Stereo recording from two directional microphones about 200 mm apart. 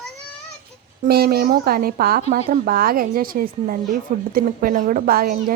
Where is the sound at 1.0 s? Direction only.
50° right (ahead or behind).